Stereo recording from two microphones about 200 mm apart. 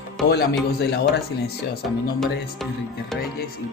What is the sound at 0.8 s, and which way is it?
Speech, 55° left (ahead or behind).